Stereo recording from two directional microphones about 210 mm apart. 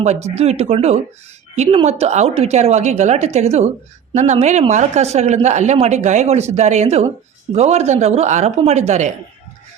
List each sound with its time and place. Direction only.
0.0 s speech: 30° right (ahead or behind)